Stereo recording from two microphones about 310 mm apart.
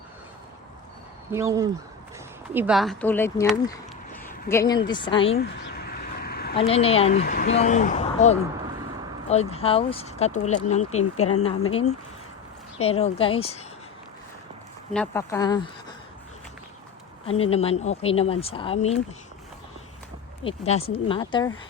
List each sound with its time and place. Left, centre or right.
1.3 s speech: centre
4.1 s a sound: centre
4.9 s speech: centre
5.4 s a sound: left
6.6 s speech: centre
14.9 s speech: centre
17.2 s speech: centre
20.4 s speech: centre